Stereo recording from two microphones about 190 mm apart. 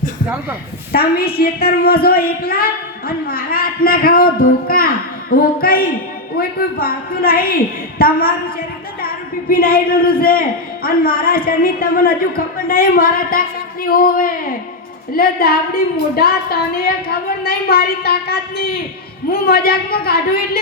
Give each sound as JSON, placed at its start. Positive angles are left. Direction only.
{"t": 0.9, "sound": "a woman's voice", "side_deg": 55}
{"t": 9.5, "sound": "a woman's voice", "side_deg": 50}